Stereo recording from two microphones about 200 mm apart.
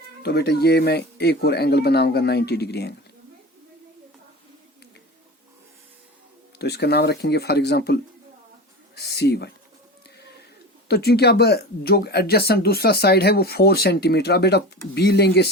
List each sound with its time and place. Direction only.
0.2 s speech: 55° left (ahead or behind)
6.6 s speech: 55° left (ahead or behind)
9.0 s speech: 55° left (ahead or behind)
10.8 s speech: 55° left (ahead or behind)